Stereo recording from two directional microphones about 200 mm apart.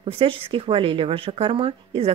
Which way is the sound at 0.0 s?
25° right (ahead or behind).